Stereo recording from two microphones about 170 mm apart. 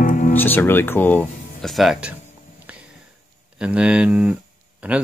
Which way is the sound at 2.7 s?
10° right (ahead or behind).